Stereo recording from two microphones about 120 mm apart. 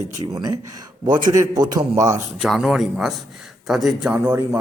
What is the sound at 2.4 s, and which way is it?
Speech, centre (ahead or behind).